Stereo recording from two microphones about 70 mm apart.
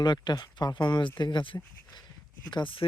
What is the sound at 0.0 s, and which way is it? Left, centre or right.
Speech, left.